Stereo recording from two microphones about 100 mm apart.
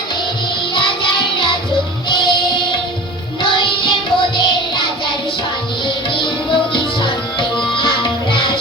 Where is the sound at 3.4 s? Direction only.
60° left (ahead or behind).